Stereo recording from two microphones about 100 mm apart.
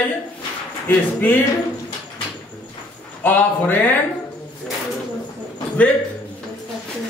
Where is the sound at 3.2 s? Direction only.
15° left (ahead or behind).